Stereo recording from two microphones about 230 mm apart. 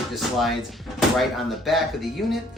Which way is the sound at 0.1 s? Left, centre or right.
Centre.